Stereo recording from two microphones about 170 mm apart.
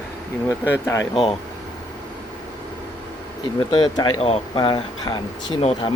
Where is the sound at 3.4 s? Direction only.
25° left (ahead or behind).